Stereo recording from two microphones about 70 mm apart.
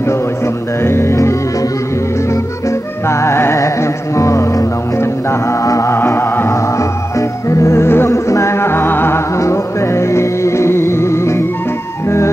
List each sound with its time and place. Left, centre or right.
0.8 s music: left
3.1 s music: left